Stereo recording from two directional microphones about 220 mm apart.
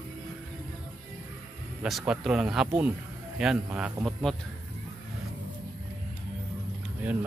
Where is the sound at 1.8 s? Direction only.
Centre (ahead or behind).